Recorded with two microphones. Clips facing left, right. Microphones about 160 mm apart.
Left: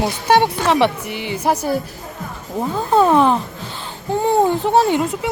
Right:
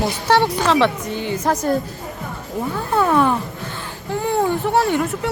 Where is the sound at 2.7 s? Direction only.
20° left (ahead or behind).